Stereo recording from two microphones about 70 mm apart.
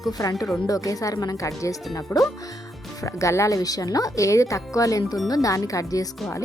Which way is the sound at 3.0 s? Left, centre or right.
Left.